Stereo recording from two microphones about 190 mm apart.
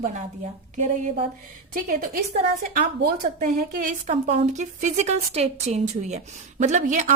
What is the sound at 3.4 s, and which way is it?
A woman's voice, 40° right (ahead or behind).